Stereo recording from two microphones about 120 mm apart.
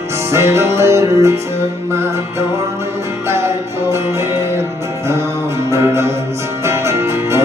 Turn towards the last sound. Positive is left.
turn(degrees=-25)  # may be behind; listen again after turning